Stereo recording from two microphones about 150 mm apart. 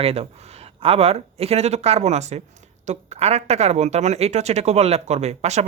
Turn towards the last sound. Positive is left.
turn(degrees=-45)  # may be behind; listen again after turning